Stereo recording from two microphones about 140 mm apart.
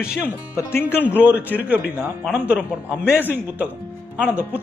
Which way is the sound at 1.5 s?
10° right (ahead or behind).